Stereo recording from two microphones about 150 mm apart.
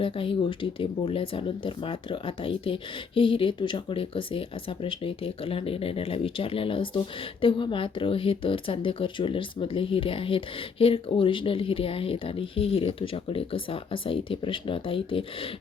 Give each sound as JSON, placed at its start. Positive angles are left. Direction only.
{"t": 0.0, "sound": "speech", "side_deg": 35}